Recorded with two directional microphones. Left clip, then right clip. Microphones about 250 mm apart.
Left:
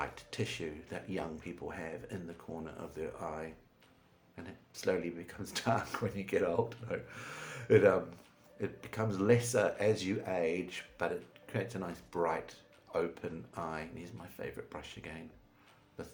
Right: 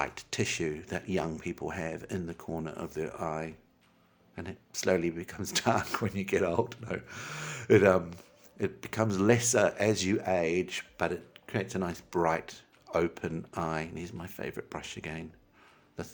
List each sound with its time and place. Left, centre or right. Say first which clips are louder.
0.0 s speech: right 6 dB; right